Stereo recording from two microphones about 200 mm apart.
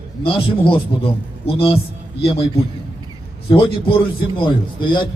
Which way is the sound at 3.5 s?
25° left (ahead or behind).